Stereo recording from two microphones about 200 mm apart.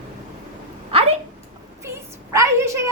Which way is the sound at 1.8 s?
15° right (ahead or behind).